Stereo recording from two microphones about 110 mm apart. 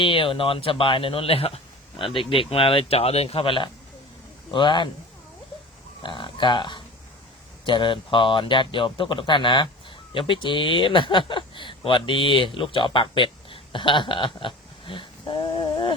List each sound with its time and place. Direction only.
0.0 s a man's voice: 55° left (ahead or behind)
6.0 s a sound: 45° left (ahead or behind)
7.6 s a man's voice: 50° left (ahead or behind)